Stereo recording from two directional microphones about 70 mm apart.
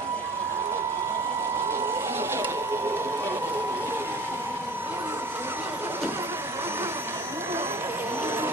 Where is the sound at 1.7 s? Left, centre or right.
Right.